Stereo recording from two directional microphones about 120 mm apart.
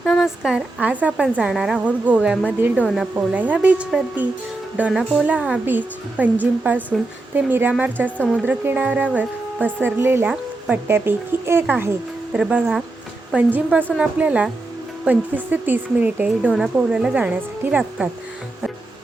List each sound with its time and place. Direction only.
0.0 s a woman's voice: 5° left (ahead or behind)
0.5 s speech: 10° right (ahead or behind)